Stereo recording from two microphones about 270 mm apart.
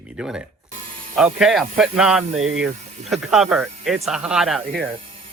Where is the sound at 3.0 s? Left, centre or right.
Centre.